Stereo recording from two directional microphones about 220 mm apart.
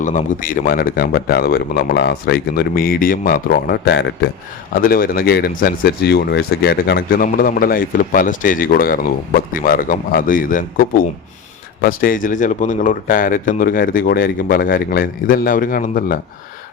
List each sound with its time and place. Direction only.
0.0 s a man's voice: 35° left (ahead or behind); by 4.3 s 50° left (ahead or behind)
4.7 s speech: 40° left (ahead or behind)